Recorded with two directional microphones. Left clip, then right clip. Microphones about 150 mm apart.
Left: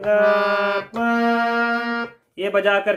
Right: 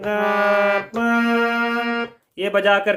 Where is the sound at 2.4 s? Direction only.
25° right (ahead or behind).